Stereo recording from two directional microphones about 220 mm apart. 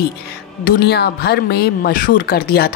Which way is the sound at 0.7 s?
45° left (ahead or behind).